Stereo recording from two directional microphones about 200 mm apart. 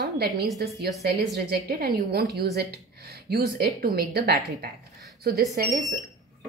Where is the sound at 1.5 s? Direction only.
55° right (ahead or behind).